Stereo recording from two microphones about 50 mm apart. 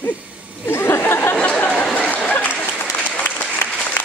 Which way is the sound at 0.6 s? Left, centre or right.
Left.